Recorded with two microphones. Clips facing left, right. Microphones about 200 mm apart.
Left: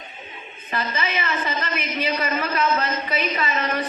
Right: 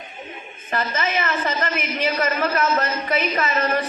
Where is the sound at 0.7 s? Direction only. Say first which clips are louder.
Right 3 dB; 45° right (ahead or behind).